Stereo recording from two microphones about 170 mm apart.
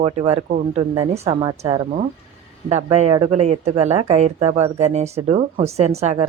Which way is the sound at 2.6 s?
40° right (ahead or behind).